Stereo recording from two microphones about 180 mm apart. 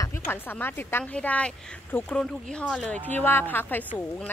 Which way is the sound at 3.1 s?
10° left (ahead or behind).